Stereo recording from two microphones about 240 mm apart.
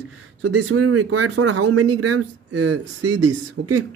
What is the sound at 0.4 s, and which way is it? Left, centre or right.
Speech, right.